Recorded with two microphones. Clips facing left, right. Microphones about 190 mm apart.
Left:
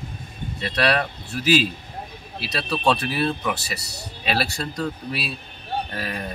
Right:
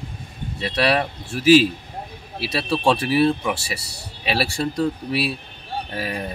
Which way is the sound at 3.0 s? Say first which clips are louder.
Right 6 dB; 5° right (ahead or behind).